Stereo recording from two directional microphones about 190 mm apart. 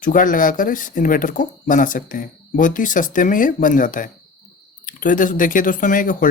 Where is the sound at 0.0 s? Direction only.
45° left (ahead or behind).